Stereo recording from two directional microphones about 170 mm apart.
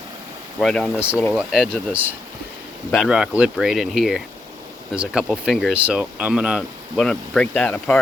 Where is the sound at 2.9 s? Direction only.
Centre (ahead or behind).